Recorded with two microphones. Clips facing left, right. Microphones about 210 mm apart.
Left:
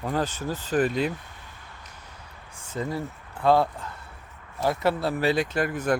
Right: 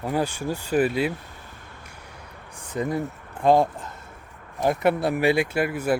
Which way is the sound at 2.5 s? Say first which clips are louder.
Right 4 dB; 15° right (ahead or behind).